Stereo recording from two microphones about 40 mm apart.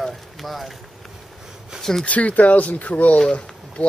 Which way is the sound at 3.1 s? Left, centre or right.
Left.